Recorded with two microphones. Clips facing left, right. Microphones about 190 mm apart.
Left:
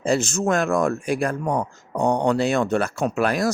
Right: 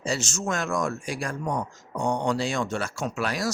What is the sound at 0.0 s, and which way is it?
Speech, 55° left (ahead or behind).